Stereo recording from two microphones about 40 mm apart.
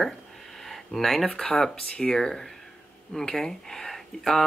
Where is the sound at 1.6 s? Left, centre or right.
Centre.